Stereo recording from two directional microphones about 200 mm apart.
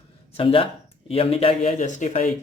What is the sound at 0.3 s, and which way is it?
Speech, 25° left (ahead or behind).